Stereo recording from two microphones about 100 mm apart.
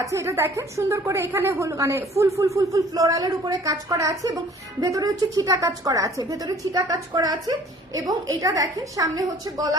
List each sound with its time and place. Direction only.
0.0 s a woman's voice: 30° right (ahead or behind)